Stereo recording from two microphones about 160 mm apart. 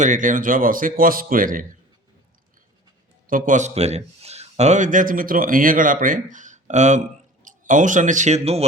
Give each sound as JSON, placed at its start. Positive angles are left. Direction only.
{"t": 0.0, "sound": "a man's voice", "side_deg": -55}
{"t": 3.2, "sound": "a man's voice", "side_deg": -55}